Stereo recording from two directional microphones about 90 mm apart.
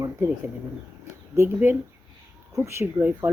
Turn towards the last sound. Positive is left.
turn(degrees=-30)  # may be behind; listen again after turning